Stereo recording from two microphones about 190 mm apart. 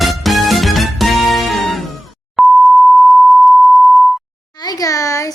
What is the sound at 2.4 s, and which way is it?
Beep, centre (ahead or behind).